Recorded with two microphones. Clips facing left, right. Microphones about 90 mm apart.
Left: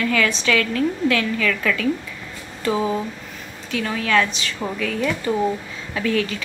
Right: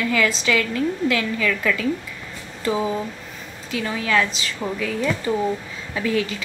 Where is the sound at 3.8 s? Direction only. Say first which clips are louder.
Left 1 dB; 20° right (ahead or behind).